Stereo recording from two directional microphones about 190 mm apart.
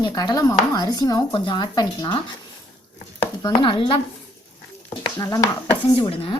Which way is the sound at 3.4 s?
25° left (ahead or behind).